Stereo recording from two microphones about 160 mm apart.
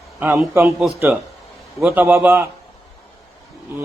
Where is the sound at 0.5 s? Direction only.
15° right (ahead or behind).